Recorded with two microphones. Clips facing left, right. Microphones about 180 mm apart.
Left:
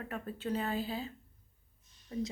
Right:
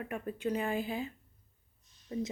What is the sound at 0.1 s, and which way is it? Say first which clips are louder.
Speech: right 2 dB; 15° right (ahead or behind).